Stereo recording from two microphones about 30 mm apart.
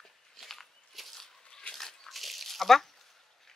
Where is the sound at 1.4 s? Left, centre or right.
Left.